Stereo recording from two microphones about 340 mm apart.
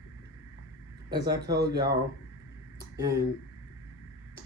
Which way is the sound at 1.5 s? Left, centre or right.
Right.